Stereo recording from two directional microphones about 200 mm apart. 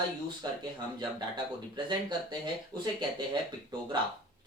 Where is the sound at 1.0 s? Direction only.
25° right (ahead or behind).